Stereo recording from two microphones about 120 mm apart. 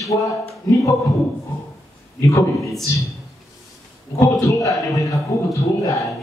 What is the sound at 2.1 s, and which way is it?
Speech, 25° left (ahead or behind).